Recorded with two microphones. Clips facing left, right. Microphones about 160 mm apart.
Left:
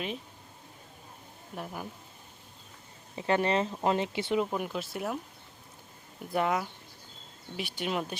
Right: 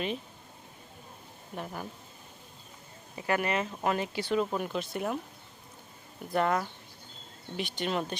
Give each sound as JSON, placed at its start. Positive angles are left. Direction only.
{"t": 1.5, "sound": "speech", "side_deg": 5}
{"t": 3.2, "sound": "speech", "side_deg": 25}
{"t": 4.5, "sound": "speech", "side_deg": 5}
{"t": 6.3, "sound": "speech", "side_deg": 5}